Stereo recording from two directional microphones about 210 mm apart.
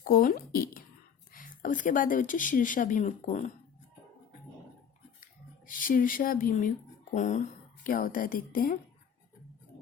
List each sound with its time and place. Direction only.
0.0 s speech: 45° left (ahead or behind)
5.2 s a sound: 40° left (ahead or behind)
7.1 s speech: 35° left (ahead or behind)